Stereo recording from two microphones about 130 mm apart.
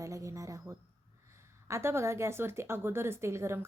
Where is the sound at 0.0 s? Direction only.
25° right (ahead or behind).